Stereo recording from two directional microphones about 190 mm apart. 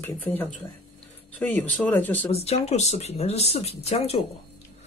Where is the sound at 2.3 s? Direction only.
35° left (ahead or behind).